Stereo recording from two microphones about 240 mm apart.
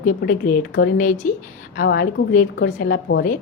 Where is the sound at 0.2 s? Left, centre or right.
Left.